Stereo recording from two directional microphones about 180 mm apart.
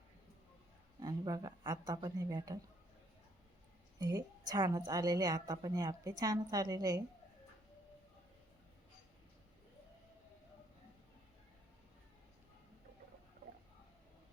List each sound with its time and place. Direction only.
0.9 s speech: 20° right (ahead or behind)
3.9 s a woman's voice: 20° right (ahead or behind)